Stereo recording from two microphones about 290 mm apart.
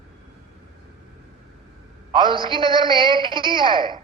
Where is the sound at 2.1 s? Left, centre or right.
Centre.